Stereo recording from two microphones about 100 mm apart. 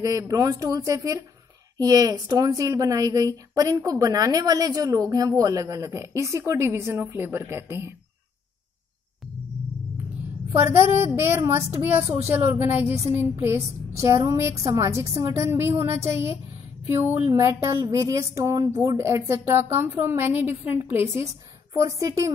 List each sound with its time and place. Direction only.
0.0 s a woman's voice: 35° right (ahead or behind)
10.5 s a woman's voice: 25° right (ahead or behind)